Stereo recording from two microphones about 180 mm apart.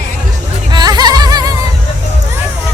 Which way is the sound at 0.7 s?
25° right (ahead or behind).